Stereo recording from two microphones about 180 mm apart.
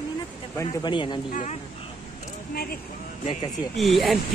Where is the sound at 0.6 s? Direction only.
25° left (ahead or behind).